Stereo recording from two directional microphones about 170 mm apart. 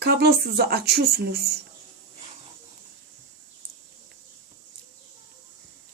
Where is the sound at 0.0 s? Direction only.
70° right (ahead or behind).